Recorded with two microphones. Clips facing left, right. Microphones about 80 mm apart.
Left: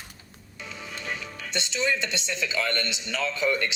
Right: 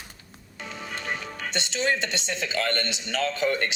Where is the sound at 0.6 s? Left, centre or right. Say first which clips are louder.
Right 3 dB; right.